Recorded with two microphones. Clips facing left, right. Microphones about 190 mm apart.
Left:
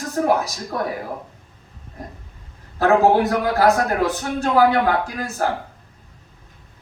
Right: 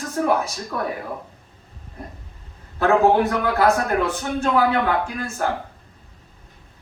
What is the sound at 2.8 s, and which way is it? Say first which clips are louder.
A man's voice: left 1 dB; 40° left (ahead or behind).